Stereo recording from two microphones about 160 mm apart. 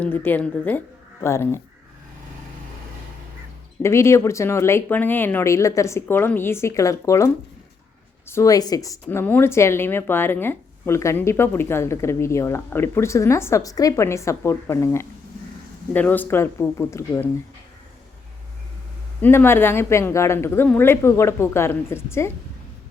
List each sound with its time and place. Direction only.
0.0 s a woman's voice: 10° left (ahead or behind)
3.8 s a woman's voice: 15° left (ahead or behind)
8.3 s a woman's voice: 20° left (ahead or behind)
19.2 s a woman's voice: 15° left (ahead or behind)